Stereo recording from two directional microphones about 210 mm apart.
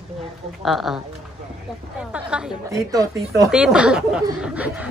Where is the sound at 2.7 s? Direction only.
15° right (ahead or behind).